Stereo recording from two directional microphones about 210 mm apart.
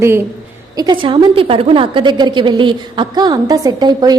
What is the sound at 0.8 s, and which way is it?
A woman's voice, 20° right (ahead or behind).